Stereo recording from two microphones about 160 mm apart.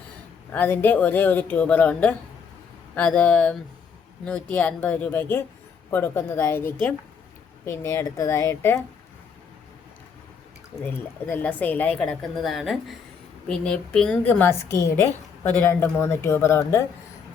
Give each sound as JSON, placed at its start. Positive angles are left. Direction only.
{"t": 0.5, "sound": "a woman's voice", "side_deg": 10}
{"t": 10.8, "sound": "a woman's voice", "side_deg": 10}